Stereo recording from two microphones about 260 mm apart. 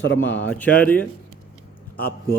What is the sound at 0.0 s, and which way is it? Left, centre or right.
Speech, left.